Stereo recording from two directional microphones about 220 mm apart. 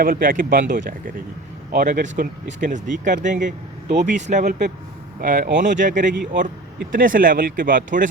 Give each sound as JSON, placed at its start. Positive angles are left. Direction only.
{"t": 0.0, "sound": "speech", "side_deg": -40}